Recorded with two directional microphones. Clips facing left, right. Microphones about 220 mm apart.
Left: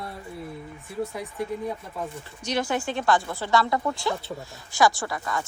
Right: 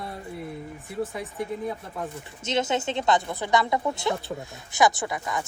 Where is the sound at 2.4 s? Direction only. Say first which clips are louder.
Right 1 dB; 20° right (ahead or behind).